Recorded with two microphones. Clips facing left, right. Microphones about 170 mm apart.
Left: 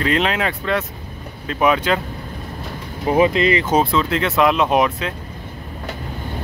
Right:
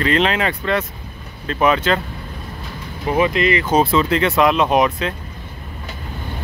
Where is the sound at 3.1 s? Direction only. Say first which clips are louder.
Left 2 dB; 30° left (ahead or behind).